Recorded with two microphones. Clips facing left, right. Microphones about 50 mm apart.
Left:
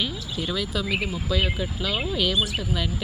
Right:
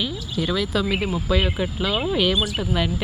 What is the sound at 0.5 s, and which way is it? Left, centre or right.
Speech, right.